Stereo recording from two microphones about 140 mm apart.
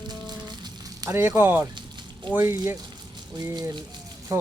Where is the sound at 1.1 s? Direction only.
15° right (ahead or behind).